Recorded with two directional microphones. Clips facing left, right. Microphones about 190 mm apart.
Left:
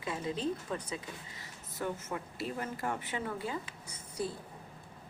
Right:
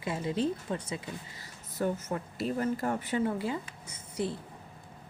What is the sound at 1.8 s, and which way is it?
Speech, 40° right (ahead or behind).